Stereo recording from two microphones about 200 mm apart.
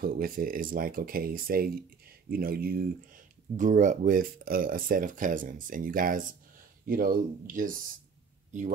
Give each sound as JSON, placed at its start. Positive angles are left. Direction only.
{"t": 0.0, "sound": "speech", "side_deg": -45}